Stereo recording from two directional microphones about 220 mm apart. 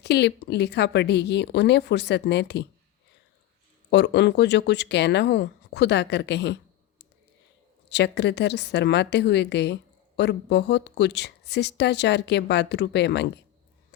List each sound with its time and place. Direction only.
0.0 s speech: 50° left (ahead or behind)
3.8 s speech: 50° left (ahead or behind)
7.9 s speech: 50° left (ahead or behind)